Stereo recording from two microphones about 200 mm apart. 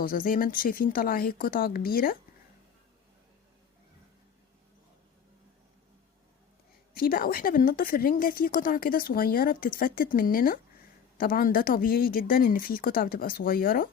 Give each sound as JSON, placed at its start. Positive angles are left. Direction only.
{"t": 0.0, "sound": "a woman's voice", "side_deg": 45}
{"t": 6.9, "sound": "a woman's voice", "side_deg": 45}